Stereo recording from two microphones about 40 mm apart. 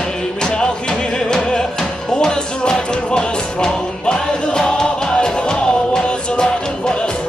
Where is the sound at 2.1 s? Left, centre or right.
Left.